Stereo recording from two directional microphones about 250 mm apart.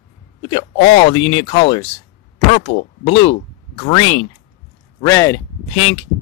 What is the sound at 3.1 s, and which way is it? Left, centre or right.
Speech, left.